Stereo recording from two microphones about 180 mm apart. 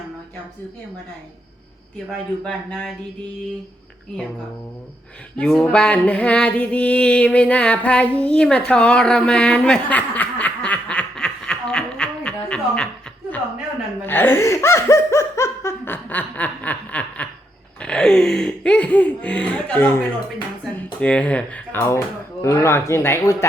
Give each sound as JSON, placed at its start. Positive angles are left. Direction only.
{"t": 2.0, "sound": "speech", "side_deg": 0}
{"t": 5.4, "sound": "a sound", "side_deg": 5}
{"t": 14.0, "sound": "laughter", "side_deg": 10}
{"t": 17.7, "sound": "speech", "side_deg": 5}
{"t": 21.0, "sound": "speech", "side_deg": 5}